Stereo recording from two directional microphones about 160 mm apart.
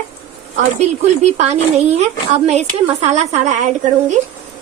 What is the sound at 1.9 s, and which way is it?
A woman's voice, 45° right (ahead or behind).